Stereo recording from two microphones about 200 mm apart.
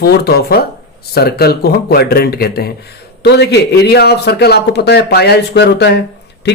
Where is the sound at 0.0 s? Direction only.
50° left (ahead or behind).